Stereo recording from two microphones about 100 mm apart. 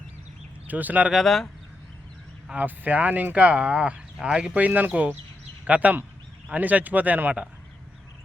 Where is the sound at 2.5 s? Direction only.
15° right (ahead or behind).